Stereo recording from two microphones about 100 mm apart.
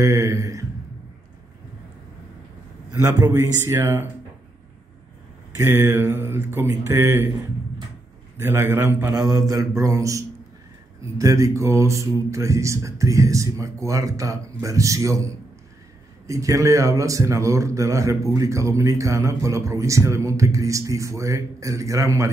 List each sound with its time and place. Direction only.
0.0 s speech: 30° right (ahead or behind)
2.9 s speech: 30° right (ahead or behind)
5.6 s speech: 30° right (ahead or behind)
8.4 s speech: 25° right (ahead or behind)
9.1 s speech: 35° right (ahead or behind)